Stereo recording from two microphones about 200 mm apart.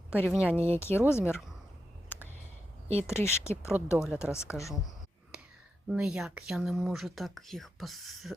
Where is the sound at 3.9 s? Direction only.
5° right (ahead or behind).